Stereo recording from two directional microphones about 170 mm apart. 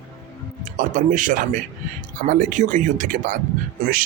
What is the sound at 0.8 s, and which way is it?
Speech, 50° right (ahead or behind).